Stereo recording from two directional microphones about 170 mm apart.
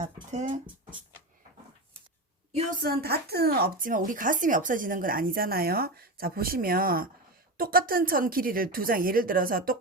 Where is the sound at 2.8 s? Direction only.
65° right (ahead or behind).